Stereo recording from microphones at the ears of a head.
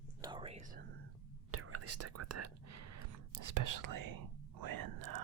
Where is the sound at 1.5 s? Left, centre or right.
Right.